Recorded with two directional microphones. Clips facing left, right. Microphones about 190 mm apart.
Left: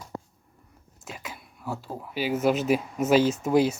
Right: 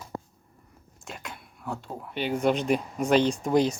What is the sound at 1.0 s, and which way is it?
Speech, 5° left (ahead or behind).